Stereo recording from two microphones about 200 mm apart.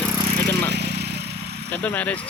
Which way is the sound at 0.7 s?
55° right (ahead or behind).